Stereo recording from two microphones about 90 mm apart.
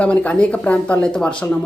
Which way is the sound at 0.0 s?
15° left (ahead or behind).